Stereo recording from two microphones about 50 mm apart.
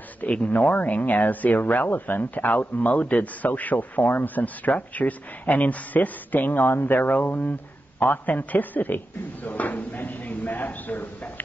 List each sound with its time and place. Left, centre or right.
0.5 s speech: left